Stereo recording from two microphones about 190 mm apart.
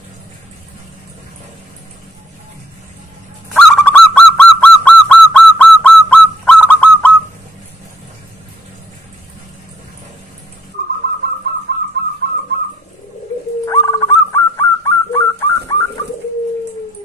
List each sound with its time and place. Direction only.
3.5 s bird: 5° left (ahead or behind)
13.7 s dog: 20° left (ahead or behind)